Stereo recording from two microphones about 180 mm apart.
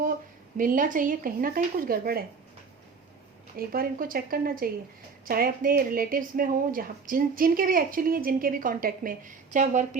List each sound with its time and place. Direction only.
0.5 s a woman's voice: 50° right (ahead or behind)
3.6 s a woman's voice: 55° right (ahead or behind)